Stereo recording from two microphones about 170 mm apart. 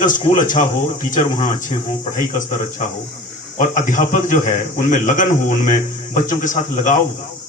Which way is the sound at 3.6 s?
50° left (ahead or behind).